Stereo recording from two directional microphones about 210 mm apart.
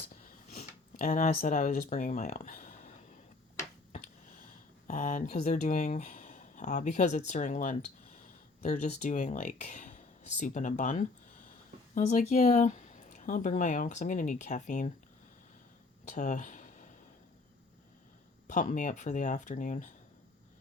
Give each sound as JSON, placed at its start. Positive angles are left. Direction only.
{"t": 0.5, "sound": "speech", "side_deg": 35}
{"t": 4.9, "sound": "speech", "side_deg": 40}
{"t": 16.0, "sound": "a sound", "side_deg": 35}
{"t": 18.4, "sound": "speech", "side_deg": 35}